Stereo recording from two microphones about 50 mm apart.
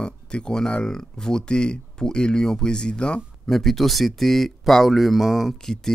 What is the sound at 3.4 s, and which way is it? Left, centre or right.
Speech, centre.